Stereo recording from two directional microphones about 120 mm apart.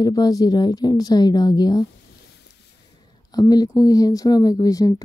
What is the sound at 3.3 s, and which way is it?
A woman's voice, 30° left (ahead or behind).